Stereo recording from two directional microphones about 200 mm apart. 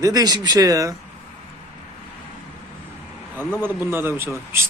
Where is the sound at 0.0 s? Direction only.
20° right (ahead or behind).